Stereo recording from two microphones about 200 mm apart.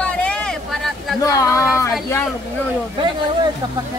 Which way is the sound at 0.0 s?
5° left (ahead or behind).